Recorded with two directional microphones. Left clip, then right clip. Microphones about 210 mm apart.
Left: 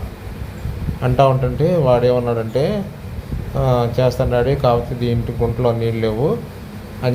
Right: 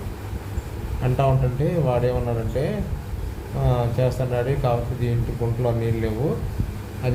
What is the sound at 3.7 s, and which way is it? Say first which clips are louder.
Speech: left 7 dB; 25° left (ahead or behind).